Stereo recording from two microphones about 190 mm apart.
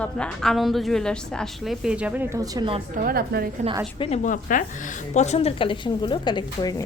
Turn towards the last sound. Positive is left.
turn(degrees=25)  # may be behind; listen again after turning